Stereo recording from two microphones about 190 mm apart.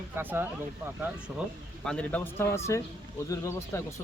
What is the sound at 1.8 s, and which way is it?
A man's voice, 5° left (ahead or behind).